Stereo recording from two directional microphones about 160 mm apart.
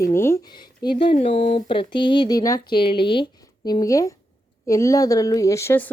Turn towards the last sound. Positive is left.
turn(degrees=15)  # may be behind; listen again after turning